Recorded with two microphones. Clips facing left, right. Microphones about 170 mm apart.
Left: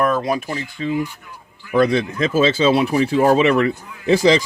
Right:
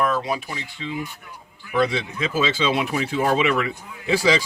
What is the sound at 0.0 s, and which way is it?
Speech, 45° left (ahead or behind).